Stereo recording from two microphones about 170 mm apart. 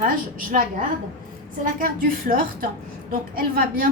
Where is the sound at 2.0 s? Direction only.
55° right (ahead or behind).